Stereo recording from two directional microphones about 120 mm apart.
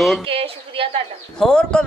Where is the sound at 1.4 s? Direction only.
5° left (ahead or behind).